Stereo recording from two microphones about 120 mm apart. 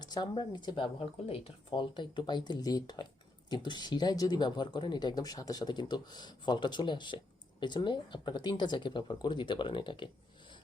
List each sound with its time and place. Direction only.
0.0 s speech: 35° left (ahead or behind)
1.7 s speech: 40° left (ahead or behind)